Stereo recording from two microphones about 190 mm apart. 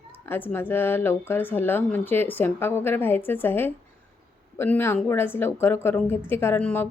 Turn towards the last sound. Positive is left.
turn(degrees=10)  # may be behind; listen again after turning